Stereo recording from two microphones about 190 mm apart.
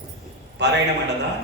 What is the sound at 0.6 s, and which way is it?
Speech, 65° right (ahead or behind).